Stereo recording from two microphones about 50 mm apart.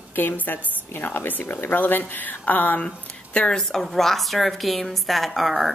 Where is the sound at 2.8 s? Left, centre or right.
Centre.